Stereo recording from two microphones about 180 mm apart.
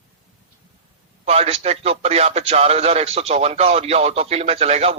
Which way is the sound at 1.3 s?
35° right (ahead or behind).